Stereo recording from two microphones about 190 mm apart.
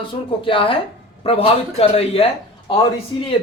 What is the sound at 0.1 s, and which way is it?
Speech, 25° left (ahead or behind).